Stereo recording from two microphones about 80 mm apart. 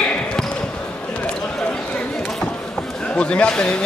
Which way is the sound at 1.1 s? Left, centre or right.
Centre.